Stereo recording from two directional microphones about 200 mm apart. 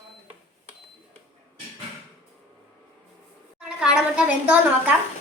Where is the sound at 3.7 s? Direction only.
5° right (ahead or behind).